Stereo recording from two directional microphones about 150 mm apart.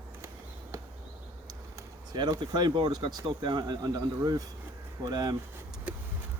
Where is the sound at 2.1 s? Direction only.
30° right (ahead or behind).